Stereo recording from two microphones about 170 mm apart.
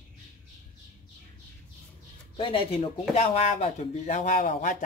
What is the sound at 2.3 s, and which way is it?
Speech, 30° left (ahead or behind).